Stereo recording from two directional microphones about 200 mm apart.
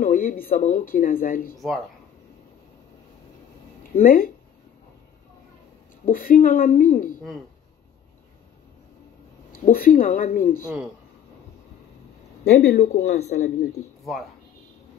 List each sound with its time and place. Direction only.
0.0 s speech: 40° left (ahead or behind)
3.9 s speech: 45° left (ahead or behind)
6.0 s speech: 45° left (ahead or behind)
9.7 s speech: 45° left (ahead or behind)
12.4 s a man's voice: 55° left (ahead or behind)